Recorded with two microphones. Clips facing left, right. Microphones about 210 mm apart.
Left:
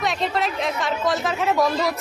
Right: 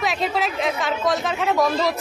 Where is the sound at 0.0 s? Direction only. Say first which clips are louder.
Even; centre (ahead or behind).